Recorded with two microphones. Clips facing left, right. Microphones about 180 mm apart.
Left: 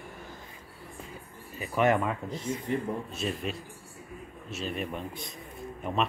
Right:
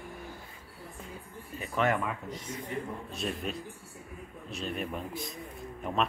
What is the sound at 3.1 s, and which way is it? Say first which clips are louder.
Speech: left 2 dB; centre (ahead or behind).